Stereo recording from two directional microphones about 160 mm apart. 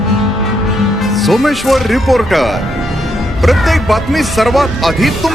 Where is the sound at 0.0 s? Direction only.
Centre (ahead or behind).